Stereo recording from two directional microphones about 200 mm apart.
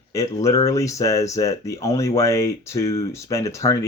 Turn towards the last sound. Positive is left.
turn(degrees=15)  # may be behind; listen again after turning